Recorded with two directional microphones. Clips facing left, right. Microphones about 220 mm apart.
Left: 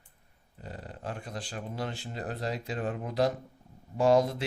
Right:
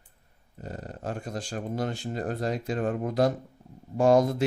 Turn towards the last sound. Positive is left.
turn(degrees=-50)  # may be behind; listen again after turning